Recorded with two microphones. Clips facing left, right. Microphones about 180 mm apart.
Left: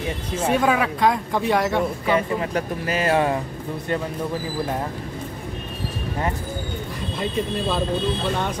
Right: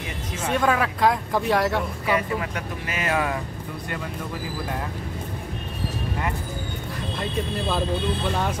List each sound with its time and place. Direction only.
0.5 s speech: 5° left (ahead or behind)
2.0 s speech: 30° left (ahead or behind)